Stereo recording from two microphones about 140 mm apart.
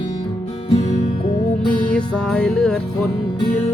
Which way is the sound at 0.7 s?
55° left (ahead or behind).